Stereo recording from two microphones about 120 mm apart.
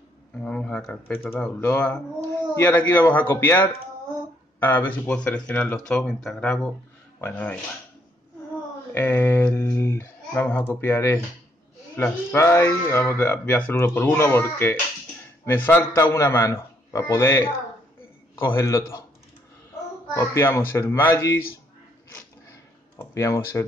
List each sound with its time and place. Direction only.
0.4 s speech: 10° left (ahead or behind)
1.1 s speech: 20° left (ahead or behind)
8.9 s speech: 15° left (ahead or behind)
20.2 s speech: 25° left (ahead or behind)
22.9 s speech: 20° left (ahead or behind)